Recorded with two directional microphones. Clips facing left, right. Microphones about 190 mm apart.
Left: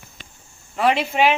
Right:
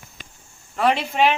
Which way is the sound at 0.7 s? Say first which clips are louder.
Left 1 dB; 5° left (ahead or behind).